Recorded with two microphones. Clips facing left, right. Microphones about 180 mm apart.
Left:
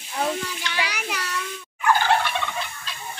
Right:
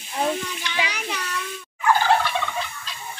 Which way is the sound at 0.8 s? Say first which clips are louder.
Even; 5° left (ahead or behind).